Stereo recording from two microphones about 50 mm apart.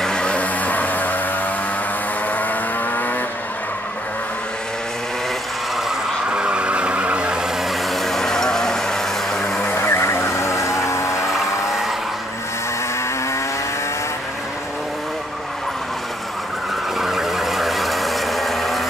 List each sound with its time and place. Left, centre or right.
0.0 s vehicle: centre; by 1.2 s left
2.3 s vehicle: left
6.3 s vehicle: right
7.9 s vehicle: centre
9.7 s music: left
11.2 s music: centre
17.0 s vehicle: centre